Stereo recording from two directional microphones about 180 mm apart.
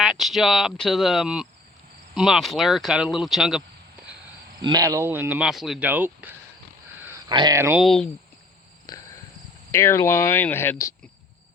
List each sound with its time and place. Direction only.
0.0 s speech: centre (ahead or behind)
4.6 s speech: 20° right (ahead or behind)
6.9 s a sound: 10° right (ahead or behind)
7.3 s speech: 20° right (ahead or behind)
7.8 s speech: centre (ahead or behind)
8.9 s cricket: 20° left (ahead or behind)
9.7 s speech: 15° left (ahead or behind)